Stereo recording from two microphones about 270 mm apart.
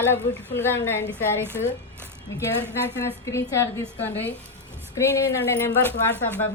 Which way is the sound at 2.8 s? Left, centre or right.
Centre.